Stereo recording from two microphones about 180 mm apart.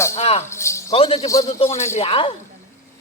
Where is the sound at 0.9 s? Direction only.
30° left (ahead or behind).